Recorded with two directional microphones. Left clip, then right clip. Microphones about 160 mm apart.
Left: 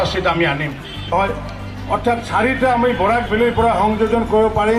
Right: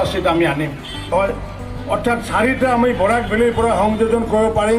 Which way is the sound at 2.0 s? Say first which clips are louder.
Even; 65° right (ahead or behind).